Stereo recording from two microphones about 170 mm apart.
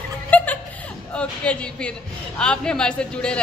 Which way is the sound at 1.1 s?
5° left (ahead or behind).